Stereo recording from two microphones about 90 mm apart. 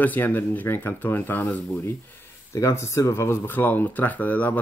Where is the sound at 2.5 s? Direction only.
35° left (ahead or behind).